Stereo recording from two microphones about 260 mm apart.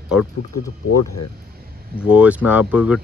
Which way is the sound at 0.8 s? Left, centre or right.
Left.